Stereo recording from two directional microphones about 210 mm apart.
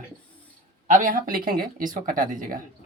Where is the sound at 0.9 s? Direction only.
40° right (ahead or behind).